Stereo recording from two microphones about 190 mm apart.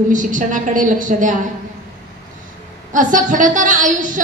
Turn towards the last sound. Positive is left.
turn(degrees=-45)  # may be behind; listen again after turning